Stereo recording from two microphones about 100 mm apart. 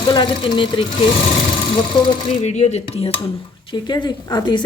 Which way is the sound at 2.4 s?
90° left.